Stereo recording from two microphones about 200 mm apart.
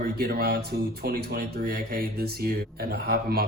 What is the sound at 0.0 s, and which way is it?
Speech, 50° right (ahead or behind).